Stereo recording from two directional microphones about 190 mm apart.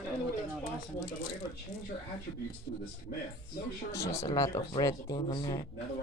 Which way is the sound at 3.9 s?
15° left (ahead or behind).